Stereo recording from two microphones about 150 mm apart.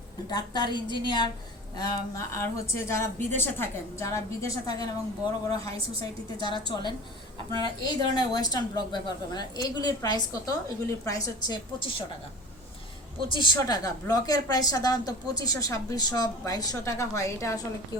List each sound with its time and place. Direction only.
0.3 s a woman's voice: 30° left (ahead or behind)
13.2 s a woman's voice: 30° left (ahead or behind)